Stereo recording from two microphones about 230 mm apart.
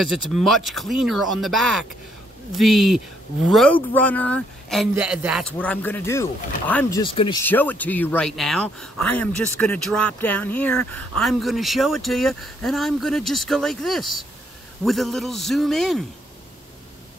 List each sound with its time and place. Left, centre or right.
0.1 s speech: centre
7.0 s speech: left
7.4 s speech: centre